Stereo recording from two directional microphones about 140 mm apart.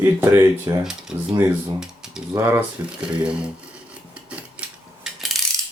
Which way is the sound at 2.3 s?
30° right (ahead or behind).